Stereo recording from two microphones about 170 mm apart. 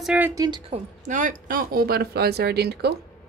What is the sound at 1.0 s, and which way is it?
Speech, 50° right (ahead or behind).